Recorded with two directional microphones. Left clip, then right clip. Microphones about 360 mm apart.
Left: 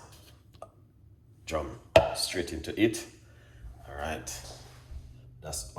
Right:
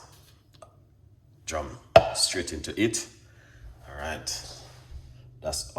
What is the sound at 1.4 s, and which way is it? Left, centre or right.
Speech, centre.